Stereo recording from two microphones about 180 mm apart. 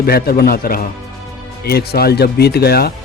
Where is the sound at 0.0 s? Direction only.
60° left (ahead or behind).